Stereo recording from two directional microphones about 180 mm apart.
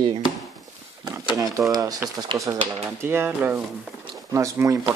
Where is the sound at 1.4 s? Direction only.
20° right (ahead or behind).